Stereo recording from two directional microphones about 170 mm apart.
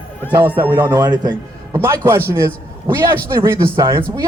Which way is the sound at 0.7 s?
25° right (ahead or behind).